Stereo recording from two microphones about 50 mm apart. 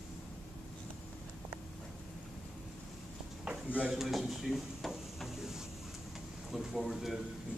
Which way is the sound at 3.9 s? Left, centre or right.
Centre.